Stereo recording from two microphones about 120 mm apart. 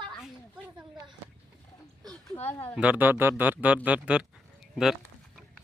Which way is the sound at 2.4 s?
15° left (ahead or behind).